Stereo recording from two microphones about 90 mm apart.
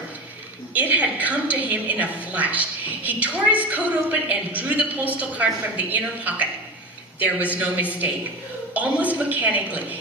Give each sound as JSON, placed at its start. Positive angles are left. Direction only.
{"t": 0.7, "sound": "a woman's voice", "side_deg": -15}